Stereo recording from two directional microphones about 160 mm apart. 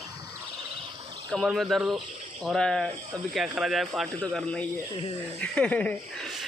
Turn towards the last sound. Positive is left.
turn(degrees=5)  # may be behind; listen again after turning